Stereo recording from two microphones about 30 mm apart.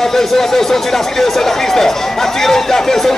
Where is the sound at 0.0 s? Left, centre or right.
Centre.